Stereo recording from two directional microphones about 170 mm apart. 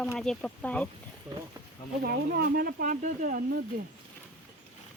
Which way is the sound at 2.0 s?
65° right (ahead or behind).